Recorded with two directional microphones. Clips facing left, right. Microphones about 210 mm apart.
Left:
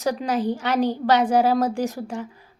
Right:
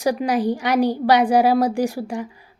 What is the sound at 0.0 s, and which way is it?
Speech, 15° right (ahead or behind).